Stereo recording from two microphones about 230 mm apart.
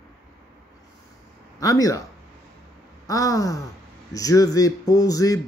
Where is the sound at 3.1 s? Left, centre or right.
Centre.